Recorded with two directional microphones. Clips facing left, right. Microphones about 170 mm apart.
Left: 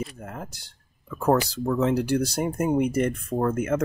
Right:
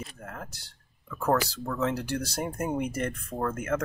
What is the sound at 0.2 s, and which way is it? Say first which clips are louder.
Speech: left 4 dB; 15° left (ahead or behind).